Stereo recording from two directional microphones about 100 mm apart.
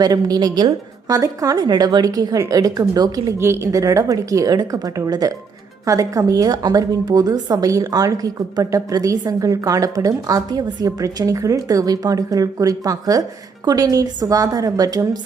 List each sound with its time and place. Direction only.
0.0 s a woman's voice: 40° right (ahead or behind)
3.3 s a woman's voice: 25° right (ahead or behind)